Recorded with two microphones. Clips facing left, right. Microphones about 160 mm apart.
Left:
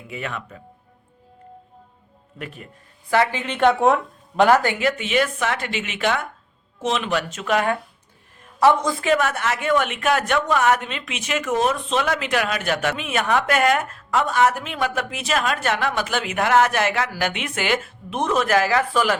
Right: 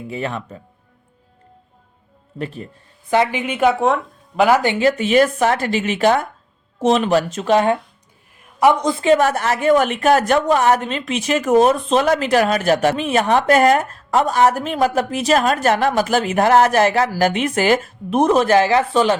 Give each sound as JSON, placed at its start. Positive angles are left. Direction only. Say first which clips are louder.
{"t": 0.1, "sound": "speech", "louder": "right 4 dB", "side_deg": -30}
{"t": 2.4, "sound": "speech", "louder": "right 8 dB", "side_deg": -30}
{"t": 3.1, "sound": "speech", "louder": "right 3 dB", "side_deg": -15}
{"t": 4.6, "sound": "speech", "louder": "right 5 dB", "side_deg": -25}
{"t": 4.9, "sound": "speech", "louder": "right 9 dB", "side_deg": -40}